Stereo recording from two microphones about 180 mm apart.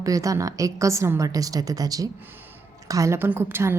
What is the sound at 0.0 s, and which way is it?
A woman's voice, 20° right (ahead or behind).